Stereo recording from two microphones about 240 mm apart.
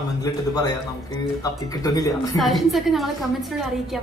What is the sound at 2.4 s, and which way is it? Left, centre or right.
A woman's voice, centre.